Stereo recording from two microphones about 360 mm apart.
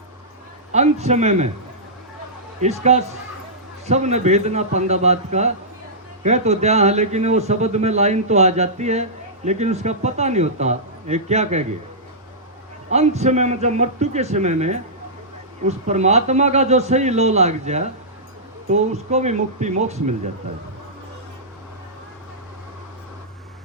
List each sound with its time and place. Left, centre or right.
0.7 s speech: centre
2.6 s speech: centre
12.9 s speech: centre